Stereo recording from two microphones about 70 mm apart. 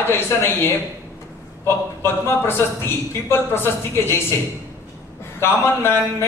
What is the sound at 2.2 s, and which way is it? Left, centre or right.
A man's voice, left.